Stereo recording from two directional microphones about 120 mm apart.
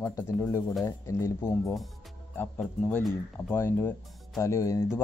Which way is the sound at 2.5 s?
10° left (ahead or behind).